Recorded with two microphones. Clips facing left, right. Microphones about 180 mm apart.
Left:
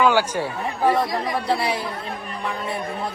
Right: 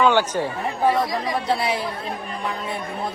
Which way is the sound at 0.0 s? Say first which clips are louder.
Even; 5° left (ahead or behind).